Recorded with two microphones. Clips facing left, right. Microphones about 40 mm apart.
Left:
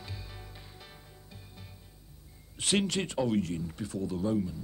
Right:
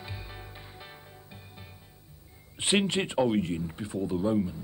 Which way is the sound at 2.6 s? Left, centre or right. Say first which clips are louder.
Right 3 dB; right.